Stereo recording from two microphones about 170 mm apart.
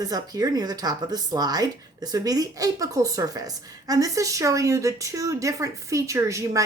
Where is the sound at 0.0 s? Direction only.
20° right (ahead or behind).